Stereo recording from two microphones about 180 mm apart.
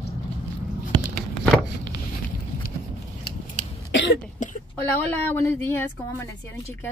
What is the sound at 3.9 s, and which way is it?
Cough, 75° left (ahead or behind).